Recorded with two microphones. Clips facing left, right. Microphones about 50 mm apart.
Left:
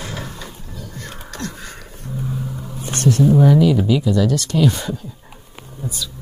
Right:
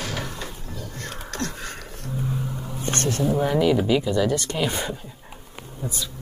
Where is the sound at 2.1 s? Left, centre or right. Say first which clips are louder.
Left 2 dB; centre.